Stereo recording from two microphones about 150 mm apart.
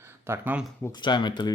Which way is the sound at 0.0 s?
15° right (ahead or behind).